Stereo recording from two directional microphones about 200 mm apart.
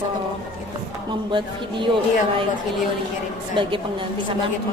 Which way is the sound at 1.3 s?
25° right (ahead or behind).